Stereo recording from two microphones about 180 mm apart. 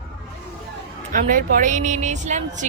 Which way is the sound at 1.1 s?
50° right (ahead or behind).